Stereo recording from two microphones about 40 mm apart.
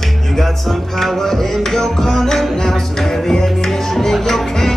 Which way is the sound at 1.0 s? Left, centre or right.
Centre.